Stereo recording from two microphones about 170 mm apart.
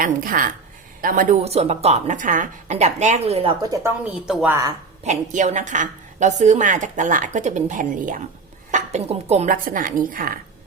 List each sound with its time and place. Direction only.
0.0 s a woman's voice: 55° right (ahead or behind); by 3.5 s 35° right (ahead or behind)
3.6 s a woman's voice: 20° right (ahead or behind)
4.0 s speech: 5° right (ahead or behind)
5.0 s a woman's voice: 45° right (ahead or behind)
9.5 s a woman's voice: 55° right (ahead or behind)